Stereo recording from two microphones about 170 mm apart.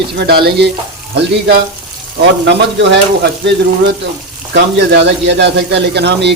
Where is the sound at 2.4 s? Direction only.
90° right.